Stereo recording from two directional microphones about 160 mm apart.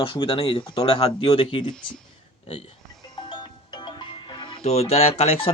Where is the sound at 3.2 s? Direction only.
30° left (ahead or behind).